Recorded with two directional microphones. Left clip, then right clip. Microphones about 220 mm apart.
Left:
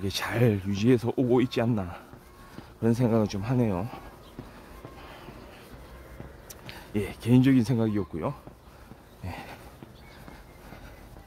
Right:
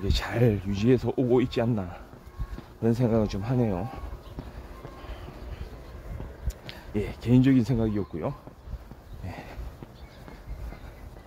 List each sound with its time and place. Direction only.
0.0 s speech: 10° left (ahead or behind)
6.9 s speech: 10° left (ahead or behind)
9.2 s a sound: 15° left (ahead or behind)